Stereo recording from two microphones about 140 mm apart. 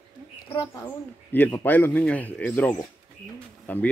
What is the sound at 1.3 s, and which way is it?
Speech, 15° left (ahead or behind).